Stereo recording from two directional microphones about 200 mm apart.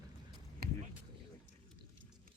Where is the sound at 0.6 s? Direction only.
50° right (ahead or behind).